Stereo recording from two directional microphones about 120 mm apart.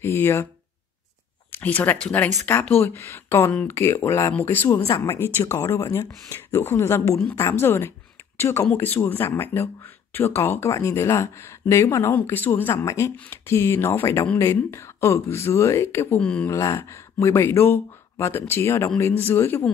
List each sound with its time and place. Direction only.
0.0 s speech: 20° left (ahead or behind)
1.5 s speech: 15° left (ahead or behind)
4.6 s speech: 30° left (ahead or behind)
16.2 s speech: 5° left (ahead or behind)
16.4 s speech: 25° left (ahead or behind)